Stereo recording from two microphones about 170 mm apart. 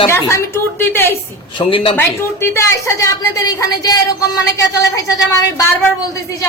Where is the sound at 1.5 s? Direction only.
30° left (ahead or behind).